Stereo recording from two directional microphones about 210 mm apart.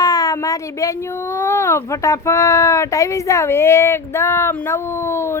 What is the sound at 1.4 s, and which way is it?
Speech, 10° left (ahead or behind).